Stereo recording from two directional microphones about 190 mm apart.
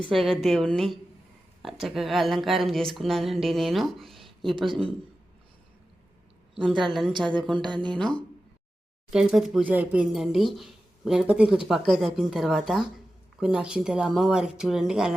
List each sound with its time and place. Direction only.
0.1 s speech: centre (ahead or behind)
4.5 s speech: 25° right (ahead or behind)
7.1 s speech: 25° right (ahead or behind)
7.9 s speech: 5° left (ahead or behind)